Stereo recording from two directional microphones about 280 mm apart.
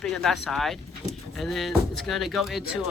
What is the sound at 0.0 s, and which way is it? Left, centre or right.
Speech, centre.